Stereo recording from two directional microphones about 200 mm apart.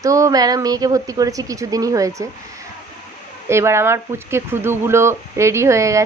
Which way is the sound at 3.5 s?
15° right (ahead or behind).